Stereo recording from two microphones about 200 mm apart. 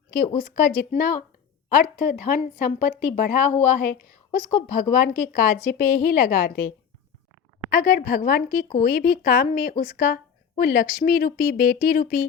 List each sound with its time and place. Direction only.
0.3 s speech: 45° left (ahead or behind)